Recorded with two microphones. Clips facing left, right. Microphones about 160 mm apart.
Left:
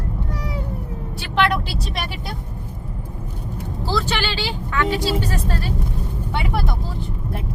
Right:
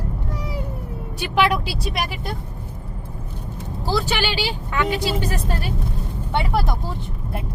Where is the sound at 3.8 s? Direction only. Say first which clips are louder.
Right 1 dB; 15° right (ahead or behind).